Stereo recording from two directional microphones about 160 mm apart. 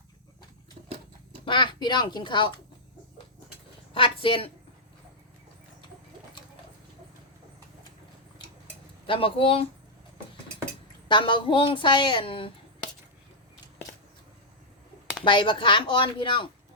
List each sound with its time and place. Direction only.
1.5 s a woman's voice: 30° left (ahead or behind)
3.9 s a woman's voice: 35° left (ahead or behind)
9.0 s a woman's voice: 35° left (ahead or behind)
11.1 s a woman's voice: 30° left (ahead or behind)
15.2 s a woman's voice: 30° left (ahead or behind)